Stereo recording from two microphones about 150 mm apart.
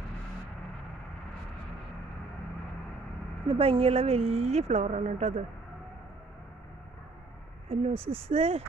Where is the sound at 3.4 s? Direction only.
40° right (ahead or behind).